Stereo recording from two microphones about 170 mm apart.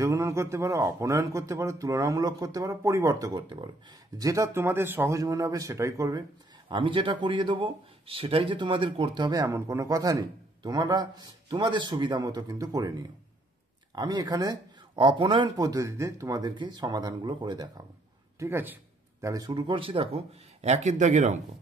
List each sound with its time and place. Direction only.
0.0 s speech: 15° right (ahead or behind)
6.7 s speech: 30° right (ahead or behind)
13.9 s speech: 20° right (ahead or behind)
18.4 s speech: 10° right (ahead or behind)
19.2 s a man's voice: 20° right (ahead or behind); by 21.4 s 45° right (ahead or behind)